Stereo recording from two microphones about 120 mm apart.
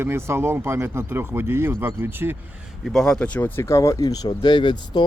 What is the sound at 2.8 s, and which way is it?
Speech, 5° left (ahead or behind).